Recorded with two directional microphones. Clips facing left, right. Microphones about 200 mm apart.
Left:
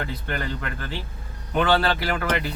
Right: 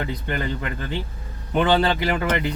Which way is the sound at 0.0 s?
15° right (ahead or behind).